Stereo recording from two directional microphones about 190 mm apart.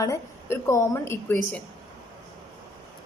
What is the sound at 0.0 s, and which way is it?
A woman's voice, 15° left (ahead or behind).